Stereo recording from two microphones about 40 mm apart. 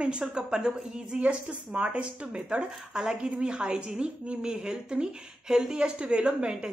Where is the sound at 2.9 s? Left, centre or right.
Right.